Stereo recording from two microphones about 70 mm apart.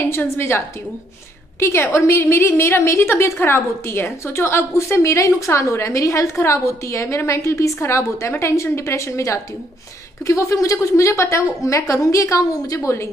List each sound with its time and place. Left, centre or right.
0.0 s a woman's voice: left